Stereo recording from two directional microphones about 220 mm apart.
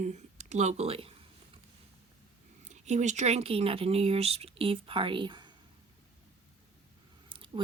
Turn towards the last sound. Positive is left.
turn(degrees=-20)  # may be behind; listen again after turning